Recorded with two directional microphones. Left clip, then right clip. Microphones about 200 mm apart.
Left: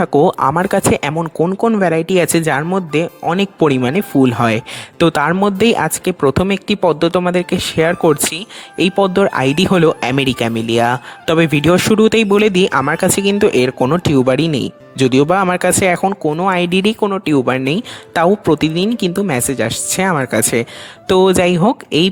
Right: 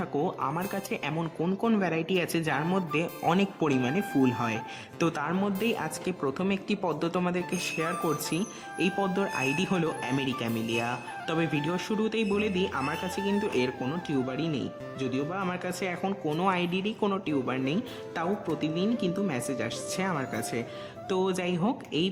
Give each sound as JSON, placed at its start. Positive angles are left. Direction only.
{"t": 0.0, "sound": "speech", "side_deg": 55}
{"t": 16.0, "sound": "speech", "side_deg": 35}
{"t": 17.0, "sound": "speech", "side_deg": 40}